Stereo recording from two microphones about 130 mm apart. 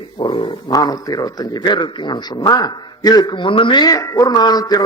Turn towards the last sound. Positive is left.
turn(degrees=30)  # may be behind; listen again after turning